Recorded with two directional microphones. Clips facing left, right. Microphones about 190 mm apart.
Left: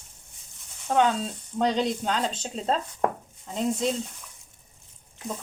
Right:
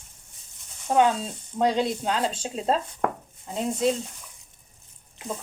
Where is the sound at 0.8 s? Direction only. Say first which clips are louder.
Right 2 dB; 10° right (ahead or behind).